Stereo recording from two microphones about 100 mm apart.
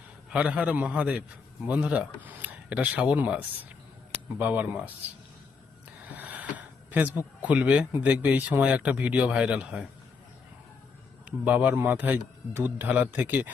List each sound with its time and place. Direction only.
0.3 s speech: 10° right (ahead or behind)
6.1 s a sound: 15° right (ahead or behind)
6.9 s speech: 20° right (ahead or behind)
11.3 s speech: 15° right (ahead or behind)